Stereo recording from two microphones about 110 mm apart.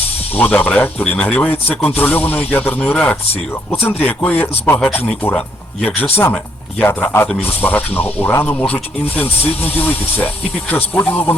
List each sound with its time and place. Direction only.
0.3 s speech: 15° left (ahead or behind)